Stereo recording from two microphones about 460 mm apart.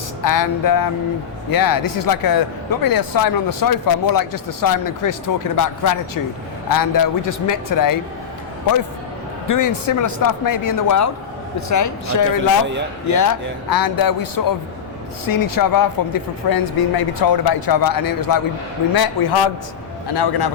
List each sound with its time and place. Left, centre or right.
0.2 s speech: left
9.5 s a man's voice: left